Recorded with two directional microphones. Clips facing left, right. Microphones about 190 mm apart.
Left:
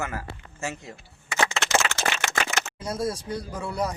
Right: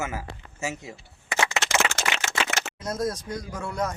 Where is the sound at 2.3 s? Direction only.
50° right (ahead or behind).